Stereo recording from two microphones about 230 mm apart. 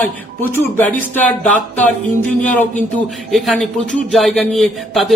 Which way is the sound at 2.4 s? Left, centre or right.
Centre.